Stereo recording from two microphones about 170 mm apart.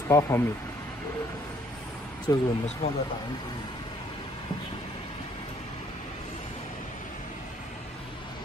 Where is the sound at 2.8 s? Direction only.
35° left (ahead or behind).